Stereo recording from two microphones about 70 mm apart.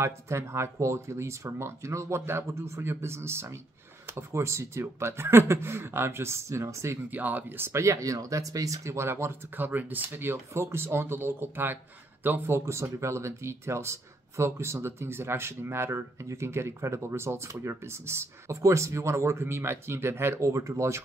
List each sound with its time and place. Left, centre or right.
0.0 s speech: right
7.1 s speech: right
7.6 s speech: right